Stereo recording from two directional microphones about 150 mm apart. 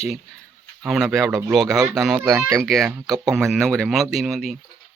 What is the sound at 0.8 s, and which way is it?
Speech, 5° right (ahead or behind).